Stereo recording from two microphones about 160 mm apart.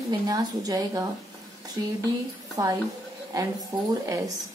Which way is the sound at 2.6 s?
20° right (ahead or behind).